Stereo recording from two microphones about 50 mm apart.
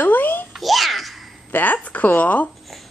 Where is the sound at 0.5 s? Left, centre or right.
Centre.